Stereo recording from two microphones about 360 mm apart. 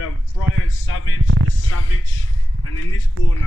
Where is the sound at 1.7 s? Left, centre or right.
Left.